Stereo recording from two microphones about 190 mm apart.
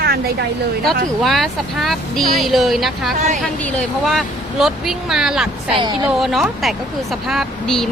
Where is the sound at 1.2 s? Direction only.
Centre (ahead or behind).